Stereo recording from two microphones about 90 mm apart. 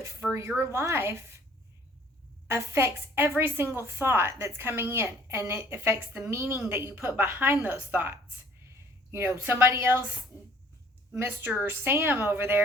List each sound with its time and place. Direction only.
0.2 s speech: centre (ahead or behind)
0.6 s a woman's voice: 30° right (ahead or behind)
2.5 s a woman's voice: 30° right (ahead or behind)
9.4 s a woman's voice: 20° right (ahead or behind)
10.3 s spray: 30° right (ahead or behind)
11.2 s a woman's voice: 25° right (ahead or behind)